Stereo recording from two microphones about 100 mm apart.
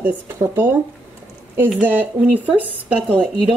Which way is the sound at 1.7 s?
15° right (ahead or behind).